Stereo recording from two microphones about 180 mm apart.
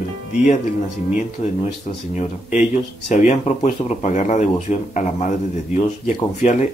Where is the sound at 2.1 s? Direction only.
40° left (ahead or behind).